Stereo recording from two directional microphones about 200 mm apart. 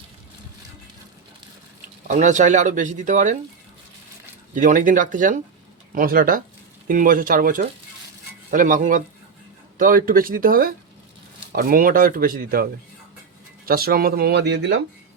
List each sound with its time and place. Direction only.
2.0 s speech: 35° right (ahead or behind)
4.5 s speech: 40° right (ahead or behind)
13.7 s speech: 50° right (ahead or behind)